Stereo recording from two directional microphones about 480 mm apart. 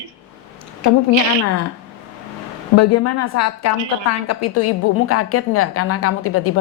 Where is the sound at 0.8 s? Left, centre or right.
Left.